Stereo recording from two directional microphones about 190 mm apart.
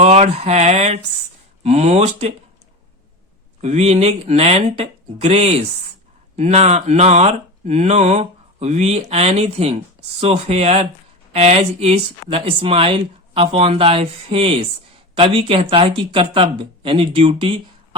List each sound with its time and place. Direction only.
0.0 s speech: 35° right (ahead or behind)
3.6 s speech: 35° right (ahead or behind)